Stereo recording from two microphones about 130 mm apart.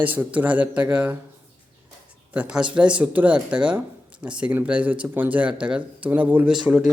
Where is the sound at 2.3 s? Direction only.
10° right (ahead or behind).